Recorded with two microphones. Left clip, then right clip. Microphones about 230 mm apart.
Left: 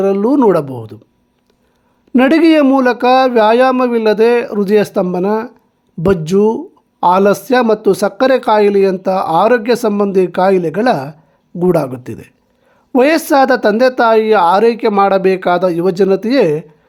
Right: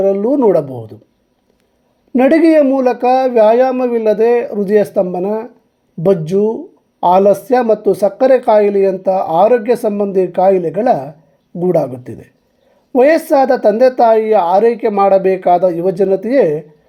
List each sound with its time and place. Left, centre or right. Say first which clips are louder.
0.0 s speech: even; left
2.1 s speech: even; left